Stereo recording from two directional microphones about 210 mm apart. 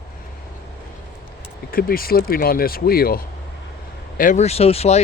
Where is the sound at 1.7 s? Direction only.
45° left (ahead or behind).